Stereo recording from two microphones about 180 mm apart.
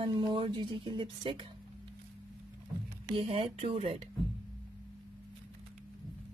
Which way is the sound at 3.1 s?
30° right (ahead or behind).